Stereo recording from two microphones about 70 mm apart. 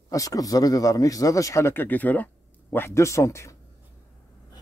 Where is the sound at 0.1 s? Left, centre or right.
Left.